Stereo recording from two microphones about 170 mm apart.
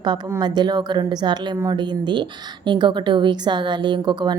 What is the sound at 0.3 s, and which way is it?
A woman's voice, 25° right (ahead or behind).